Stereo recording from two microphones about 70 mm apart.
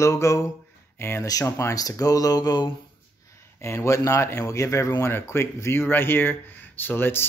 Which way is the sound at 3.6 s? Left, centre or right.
Left.